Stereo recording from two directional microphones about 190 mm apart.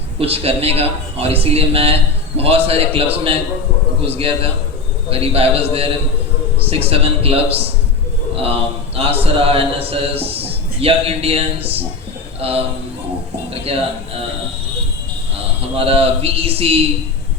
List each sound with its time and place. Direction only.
0.2 s a man's voice: 30° right (ahead or behind)
9.0 s a man's voice: 30° right (ahead or behind)
15.7 s a man's voice: 30° right (ahead or behind)